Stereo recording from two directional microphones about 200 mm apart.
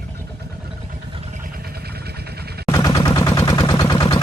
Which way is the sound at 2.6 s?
15° left (ahead or behind).